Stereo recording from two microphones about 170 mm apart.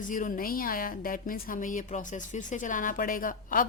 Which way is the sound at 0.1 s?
50° left (ahead or behind).